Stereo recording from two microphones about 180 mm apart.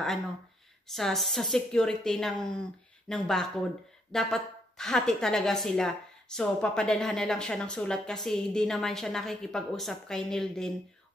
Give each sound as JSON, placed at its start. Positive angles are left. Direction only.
{"t": 0.8, "sound": "a woman's voice", "side_deg": 0}